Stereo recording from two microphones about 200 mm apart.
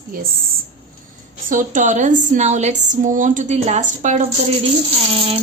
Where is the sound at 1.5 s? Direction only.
40° right (ahead or behind).